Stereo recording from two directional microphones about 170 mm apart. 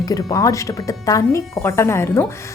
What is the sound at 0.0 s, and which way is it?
A woman's voice, 20° left (ahead or behind).